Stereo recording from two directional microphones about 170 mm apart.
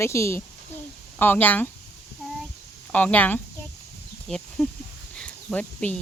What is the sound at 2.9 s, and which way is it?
Speech, 10° left (ahead or behind).